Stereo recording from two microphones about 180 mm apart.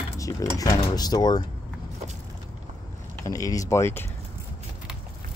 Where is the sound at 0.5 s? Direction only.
20° left (ahead or behind).